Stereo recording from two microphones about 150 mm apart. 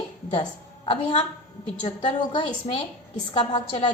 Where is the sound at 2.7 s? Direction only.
40° left (ahead or behind).